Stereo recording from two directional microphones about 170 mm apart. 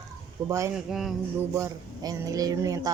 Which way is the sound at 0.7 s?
Centre (ahead or behind).